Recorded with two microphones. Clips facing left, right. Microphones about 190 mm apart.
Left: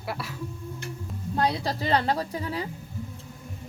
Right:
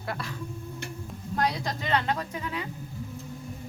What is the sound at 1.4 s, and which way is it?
Speech, 30° left (ahead or behind).